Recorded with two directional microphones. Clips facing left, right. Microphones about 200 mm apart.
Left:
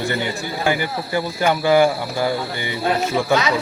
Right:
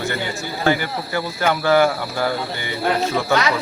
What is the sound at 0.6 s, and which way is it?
Speech, 15° left (ahead or behind).